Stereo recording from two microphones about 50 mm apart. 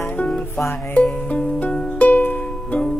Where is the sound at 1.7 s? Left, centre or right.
Centre.